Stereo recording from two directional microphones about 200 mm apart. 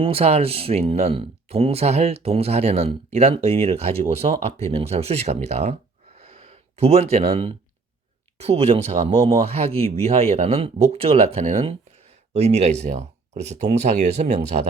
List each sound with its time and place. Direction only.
0.0 s speech: 30° right (ahead or behind)
6.1 s a sound: 30° right (ahead or behind)
8.4 s speech: 30° right (ahead or behind)